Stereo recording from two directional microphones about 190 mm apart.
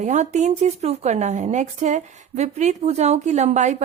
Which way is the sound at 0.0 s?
40° right (ahead or behind).